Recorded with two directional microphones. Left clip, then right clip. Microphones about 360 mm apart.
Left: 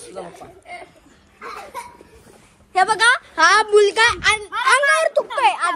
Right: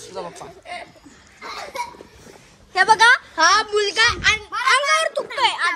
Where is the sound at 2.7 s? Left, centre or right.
Centre.